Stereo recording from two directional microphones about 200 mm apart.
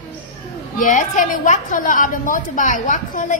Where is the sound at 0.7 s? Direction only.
40° left (ahead or behind).